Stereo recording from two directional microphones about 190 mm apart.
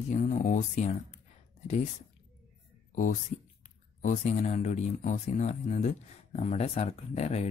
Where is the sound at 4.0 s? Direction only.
40° left (ahead or behind).